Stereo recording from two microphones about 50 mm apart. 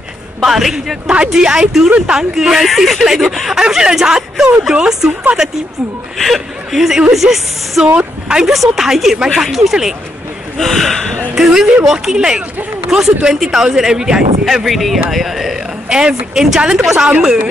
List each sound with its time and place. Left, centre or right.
0.4 s a woman's voice: centre
1.0 s speech: centre
6.1 s a woman's voice: centre
10.6 s speech: centre
11.3 s speech: centre
15.9 s a woman's voice: centre